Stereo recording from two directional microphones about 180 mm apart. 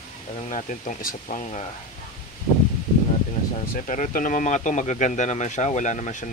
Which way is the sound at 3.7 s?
45° left (ahead or behind).